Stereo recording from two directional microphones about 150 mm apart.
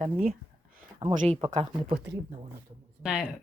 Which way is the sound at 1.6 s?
30° right (ahead or behind).